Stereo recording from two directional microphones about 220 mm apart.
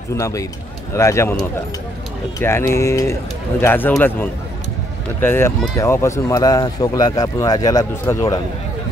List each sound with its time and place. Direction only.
0.1 s a man's voice: 15° left (ahead or behind)